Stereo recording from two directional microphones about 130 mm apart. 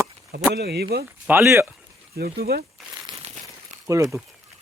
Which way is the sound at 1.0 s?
15° right (ahead or behind).